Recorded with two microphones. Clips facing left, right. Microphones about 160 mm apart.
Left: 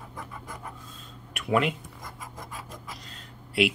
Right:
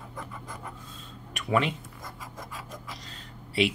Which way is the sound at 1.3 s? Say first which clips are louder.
Left 1 dB; 5° left (ahead or behind).